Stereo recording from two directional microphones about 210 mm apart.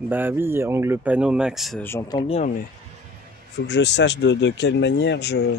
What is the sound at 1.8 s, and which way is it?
Speech, 15° left (ahead or behind).